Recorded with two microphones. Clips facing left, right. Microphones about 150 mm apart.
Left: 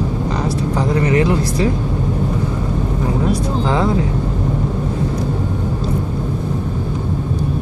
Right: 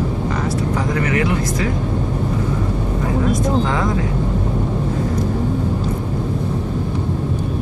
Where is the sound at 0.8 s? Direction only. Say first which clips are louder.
Left 6 dB; 30° left (ahead or behind).